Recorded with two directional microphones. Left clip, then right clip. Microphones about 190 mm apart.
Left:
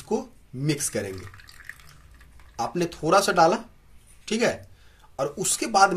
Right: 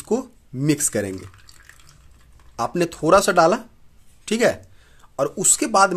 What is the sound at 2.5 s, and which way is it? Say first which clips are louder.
Speech: right 5 dB; 55° right (ahead or behind).